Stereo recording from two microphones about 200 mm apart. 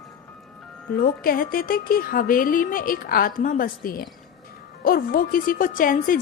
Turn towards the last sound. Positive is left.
turn(degrees=45)  # may be behind; listen again after turning